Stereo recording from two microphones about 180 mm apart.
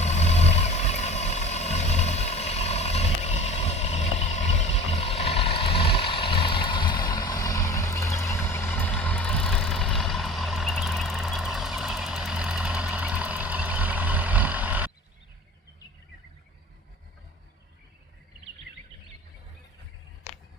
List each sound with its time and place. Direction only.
0.0 s vehicle: 40° left (ahead or behind); by 14.8 s 10° right (ahead or behind)